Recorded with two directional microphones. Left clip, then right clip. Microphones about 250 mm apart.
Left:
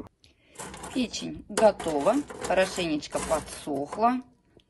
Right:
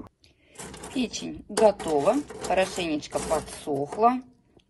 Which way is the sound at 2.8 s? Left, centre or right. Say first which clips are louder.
Right 1 dB; centre.